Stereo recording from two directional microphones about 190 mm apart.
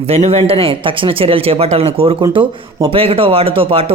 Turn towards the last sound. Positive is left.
turn(degrees=-30)  # may be behind; listen again after turning